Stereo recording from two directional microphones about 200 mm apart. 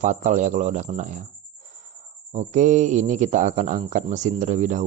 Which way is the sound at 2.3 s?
35° right (ahead or behind).